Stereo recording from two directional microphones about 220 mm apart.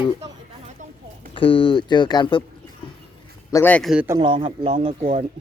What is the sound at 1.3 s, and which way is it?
Speech, 20° left (ahead or behind).